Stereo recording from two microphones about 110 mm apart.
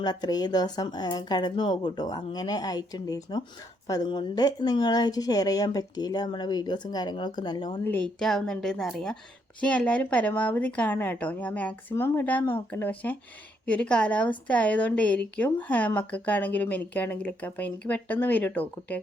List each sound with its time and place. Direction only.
0.0 s speech: 40° left (ahead or behind)
7.9 s speech: 15° left (ahead or behind)
8.2 s a woman's voice: 5° left (ahead or behind)